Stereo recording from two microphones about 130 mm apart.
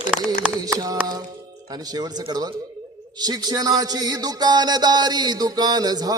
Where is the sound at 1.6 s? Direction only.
30° right (ahead or behind).